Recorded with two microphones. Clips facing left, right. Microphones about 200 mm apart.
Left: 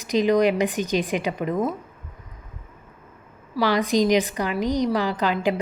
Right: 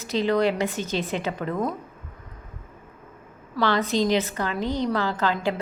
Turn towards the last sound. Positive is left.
turn(degrees=15)  # may be behind; listen again after turning